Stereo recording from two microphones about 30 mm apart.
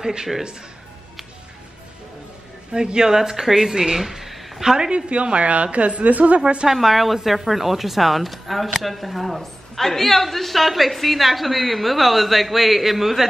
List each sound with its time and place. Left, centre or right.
0.0 s speech: right
2.7 s speech: right
4.0 s a sound: centre
4.7 s speech: right
5.1 s a woman's voice: right
6.7 s speech: centre